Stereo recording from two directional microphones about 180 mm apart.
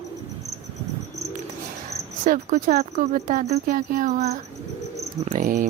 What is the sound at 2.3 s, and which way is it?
Speech, 40° right (ahead or behind).